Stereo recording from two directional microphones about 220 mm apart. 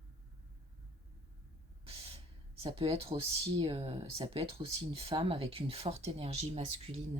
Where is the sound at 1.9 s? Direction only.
25° right (ahead or behind).